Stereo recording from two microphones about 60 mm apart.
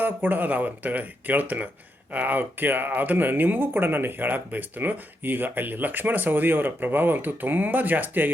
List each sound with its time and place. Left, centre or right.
0.0 s speech: right